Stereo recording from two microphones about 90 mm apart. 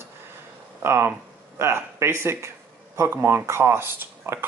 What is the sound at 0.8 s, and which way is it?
Speech, 25° right (ahead or behind).